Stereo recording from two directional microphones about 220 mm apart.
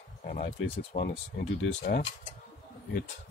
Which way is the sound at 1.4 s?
45° left (ahead or behind).